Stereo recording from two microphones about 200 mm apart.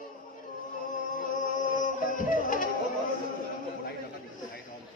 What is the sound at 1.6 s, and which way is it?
Music, 40° left (ahead or behind).